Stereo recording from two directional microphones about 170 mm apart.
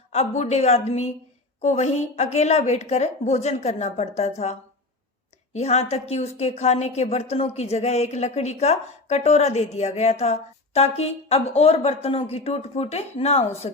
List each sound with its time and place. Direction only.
0.1 s a woman's voice: 40° left (ahead or behind)
5.5 s a woman's voice: 40° left (ahead or behind)